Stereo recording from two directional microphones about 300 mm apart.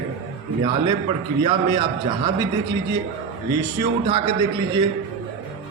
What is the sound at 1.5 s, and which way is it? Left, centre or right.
Speech, centre.